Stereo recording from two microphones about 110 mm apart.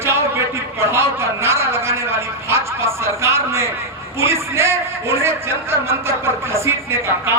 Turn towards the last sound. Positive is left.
turn(degrees=-25)  # may be behind; listen again after turning